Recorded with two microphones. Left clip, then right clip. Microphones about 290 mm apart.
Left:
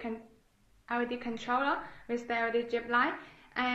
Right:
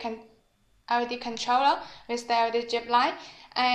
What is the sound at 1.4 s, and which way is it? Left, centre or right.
A woman's voice, right.